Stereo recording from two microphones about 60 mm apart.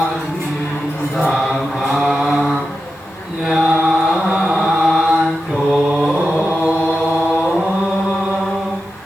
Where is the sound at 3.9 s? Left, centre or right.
Centre.